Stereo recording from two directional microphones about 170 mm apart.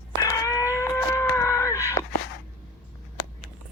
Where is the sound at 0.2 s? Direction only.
20° left (ahead or behind).